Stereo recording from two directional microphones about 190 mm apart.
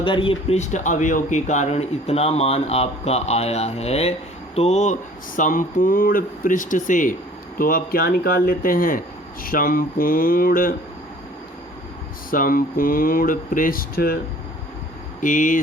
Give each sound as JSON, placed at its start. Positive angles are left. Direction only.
{"t": 0.0, "sound": "speech", "side_deg": 25}
{"t": 12.3, "sound": "speech", "side_deg": 50}
{"t": 15.2, "sound": "speech", "side_deg": 45}